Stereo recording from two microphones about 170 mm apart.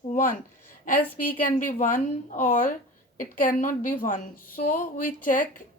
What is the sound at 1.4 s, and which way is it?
A woman's voice, 50° left (ahead or behind).